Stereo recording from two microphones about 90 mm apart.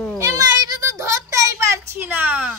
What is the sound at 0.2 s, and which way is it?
Children playing, 40° right (ahead or behind).